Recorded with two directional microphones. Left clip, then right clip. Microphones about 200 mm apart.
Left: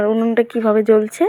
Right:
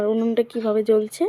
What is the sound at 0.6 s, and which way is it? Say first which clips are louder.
Speech: left 6 dB; 15° left (ahead or behind).